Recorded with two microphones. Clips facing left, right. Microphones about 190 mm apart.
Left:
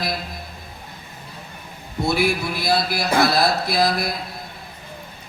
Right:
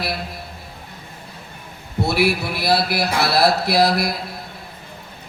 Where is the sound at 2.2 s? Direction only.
65° right (ahead or behind).